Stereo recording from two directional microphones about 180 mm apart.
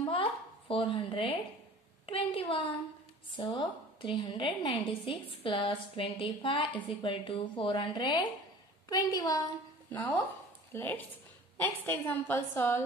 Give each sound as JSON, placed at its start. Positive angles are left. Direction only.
{"t": 0.1, "sound": "a sound", "side_deg": 30}
{"t": 2.0, "sound": "a woman's voice", "side_deg": 30}
{"t": 10.7, "sound": "a woman's voice", "side_deg": 10}